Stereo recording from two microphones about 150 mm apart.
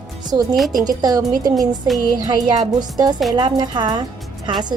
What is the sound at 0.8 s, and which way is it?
Speech, 25° right (ahead or behind).